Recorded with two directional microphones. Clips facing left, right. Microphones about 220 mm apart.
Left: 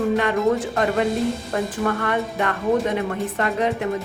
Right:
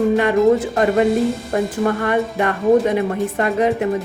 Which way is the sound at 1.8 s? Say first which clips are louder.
Right 4 dB; 25° right (ahead or behind).